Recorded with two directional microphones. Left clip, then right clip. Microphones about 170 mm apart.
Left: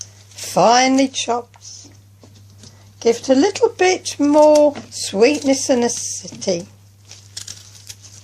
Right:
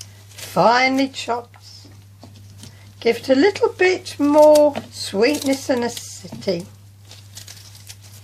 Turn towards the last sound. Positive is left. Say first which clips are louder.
# left 3 dB
turn(degrees=35)  # may be behind; listen again after turning